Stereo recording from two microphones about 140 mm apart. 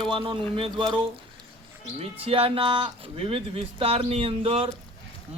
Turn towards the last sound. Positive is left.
turn(degrees=-40)  # may be behind; listen again after turning